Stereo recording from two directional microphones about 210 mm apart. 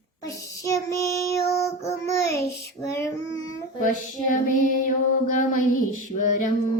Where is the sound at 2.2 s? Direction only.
50° left (ahead or behind).